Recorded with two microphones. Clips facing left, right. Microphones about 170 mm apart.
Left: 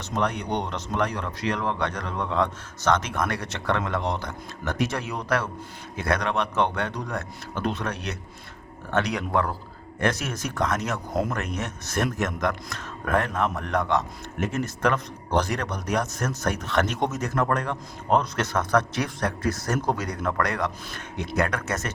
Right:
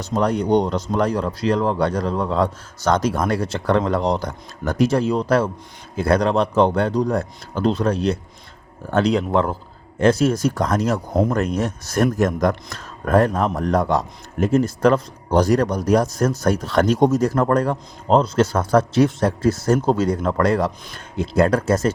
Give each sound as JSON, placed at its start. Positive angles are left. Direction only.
{"t": 0.0, "sound": "speech", "side_deg": -35}